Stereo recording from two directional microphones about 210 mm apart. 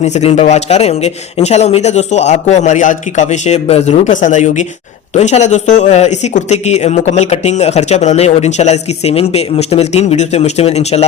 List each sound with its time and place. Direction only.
0.0 s speech: 30° left (ahead or behind)